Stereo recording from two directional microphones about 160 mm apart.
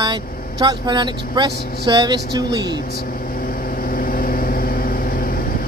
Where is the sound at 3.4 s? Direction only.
60° left (ahead or behind).